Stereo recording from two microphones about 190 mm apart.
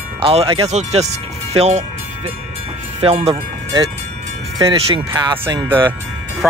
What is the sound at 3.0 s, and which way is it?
Speech, 30° right (ahead or behind).